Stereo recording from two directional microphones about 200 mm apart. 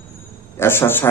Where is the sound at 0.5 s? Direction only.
10° left (ahead or behind).